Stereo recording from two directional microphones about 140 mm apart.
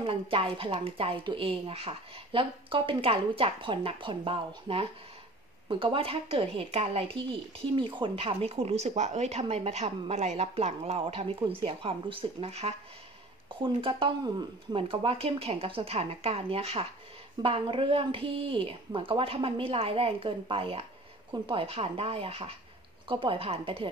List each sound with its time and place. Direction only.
0.0 s a woman's voice: 40° right (ahead or behind)
13.6 s a woman's voice: 35° right (ahead or behind)